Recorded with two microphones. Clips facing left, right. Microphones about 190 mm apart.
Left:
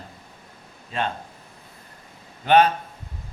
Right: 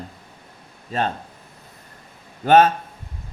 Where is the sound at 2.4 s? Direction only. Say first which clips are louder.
Right 3 dB; 45° right (ahead or behind).